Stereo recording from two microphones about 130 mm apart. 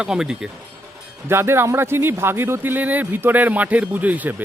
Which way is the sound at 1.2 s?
20° right (ahead or behind).